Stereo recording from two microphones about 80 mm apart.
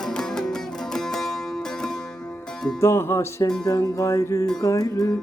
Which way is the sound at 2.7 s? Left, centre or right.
Left.